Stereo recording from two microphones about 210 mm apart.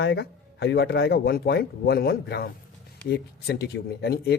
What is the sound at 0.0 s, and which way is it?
Speech, 50° left (ahead or behind).